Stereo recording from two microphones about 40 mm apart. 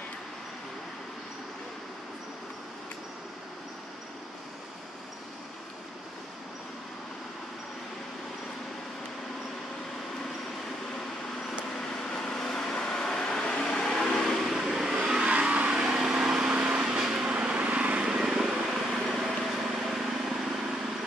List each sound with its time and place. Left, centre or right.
12.1 s vehicle: centre
14.4 s vehicle: centre
15.1 s vehicle: right
16.0 s a sound: centre
16.5 s vehicle: right
18.2 s vehicle: centre